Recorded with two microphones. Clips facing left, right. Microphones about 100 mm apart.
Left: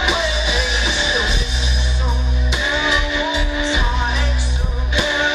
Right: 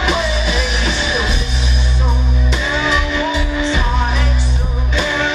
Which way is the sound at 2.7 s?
5° left (ahead or behind).